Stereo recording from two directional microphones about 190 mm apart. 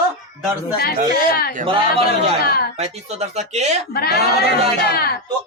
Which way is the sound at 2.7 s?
35° right (ahead or behind).